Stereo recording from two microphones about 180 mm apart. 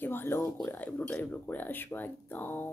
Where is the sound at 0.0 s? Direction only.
10° left (ahead or behind).